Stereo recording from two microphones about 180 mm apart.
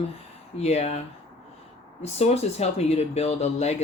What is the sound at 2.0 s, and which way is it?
Speech, 35° left (ahead or behind).